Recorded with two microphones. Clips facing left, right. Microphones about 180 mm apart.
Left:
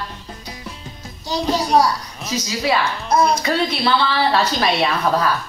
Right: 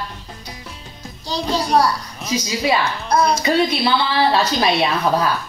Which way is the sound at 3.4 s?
15° right (ahead or behind).